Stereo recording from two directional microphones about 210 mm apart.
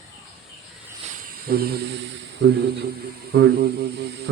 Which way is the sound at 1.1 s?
45° right (ahead or behind).